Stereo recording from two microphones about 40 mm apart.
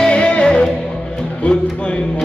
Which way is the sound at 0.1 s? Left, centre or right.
Left.